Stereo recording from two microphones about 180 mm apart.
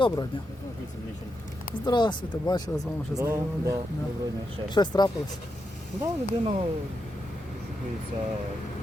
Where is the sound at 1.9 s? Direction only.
25° left (ahead or behind).